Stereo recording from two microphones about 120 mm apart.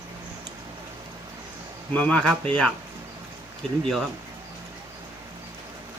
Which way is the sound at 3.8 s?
Centre (ahead or behind).